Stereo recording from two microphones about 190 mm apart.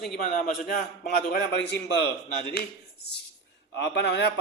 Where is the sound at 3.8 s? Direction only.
65° left (ahead or behind).